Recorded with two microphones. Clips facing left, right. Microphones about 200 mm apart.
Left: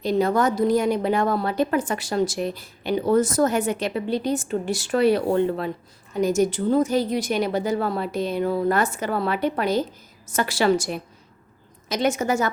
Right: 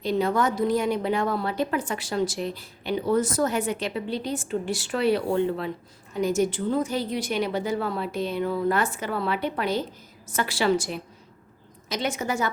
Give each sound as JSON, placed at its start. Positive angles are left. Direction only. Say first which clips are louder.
{"t": 0.0, "sound": "a woman's voice", "louder": "left 3 dB", "side_deg": 40}